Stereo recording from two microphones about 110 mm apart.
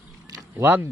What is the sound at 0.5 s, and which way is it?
Speech, 20° right (ahead or behind).